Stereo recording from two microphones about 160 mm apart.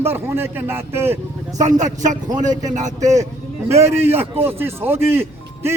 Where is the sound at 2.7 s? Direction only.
50° right (ahead or behind).